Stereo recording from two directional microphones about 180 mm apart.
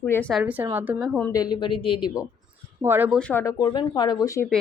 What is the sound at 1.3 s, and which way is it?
Speech, 20° left (ahead or behind).